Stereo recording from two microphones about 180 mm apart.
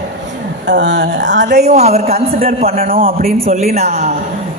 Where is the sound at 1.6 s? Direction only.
35° right (ahead or behind).